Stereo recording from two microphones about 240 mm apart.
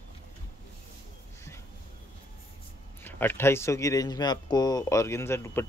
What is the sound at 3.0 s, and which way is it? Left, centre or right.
Speech, centre.